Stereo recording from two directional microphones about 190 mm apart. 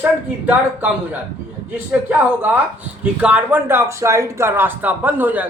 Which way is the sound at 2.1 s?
10° right (ahead or behind).